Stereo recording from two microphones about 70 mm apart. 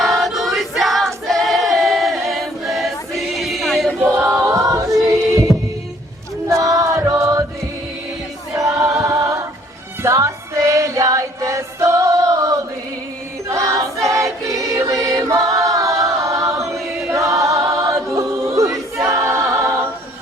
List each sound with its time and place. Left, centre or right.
0.0 s choir: centre
4.3 s choir: right
5.5 s heart sounds: centre
6.5 s chant: right
8.5 s choir: right
10.0 s music: right
13.5 s choir: right